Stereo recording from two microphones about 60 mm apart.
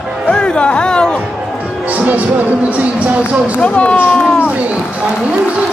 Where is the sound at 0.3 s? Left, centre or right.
Centre.